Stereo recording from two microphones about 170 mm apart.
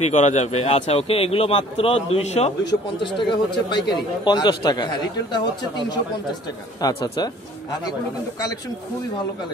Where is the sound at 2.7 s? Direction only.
30° left (ahead or behind).